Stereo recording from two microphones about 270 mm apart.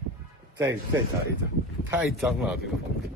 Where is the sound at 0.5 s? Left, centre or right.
Centre.